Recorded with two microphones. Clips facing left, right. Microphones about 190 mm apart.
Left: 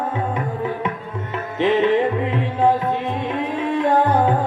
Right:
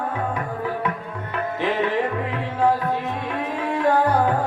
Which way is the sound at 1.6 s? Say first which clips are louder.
Left 7 dB; 20° left (ahead or behind).